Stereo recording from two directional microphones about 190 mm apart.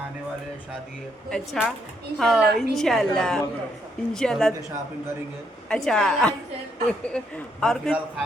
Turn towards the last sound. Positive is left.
turn(degrees=5)  # may be behind; listen again after turning